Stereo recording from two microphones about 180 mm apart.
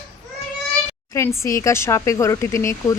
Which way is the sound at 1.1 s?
15° left (ahead or behind).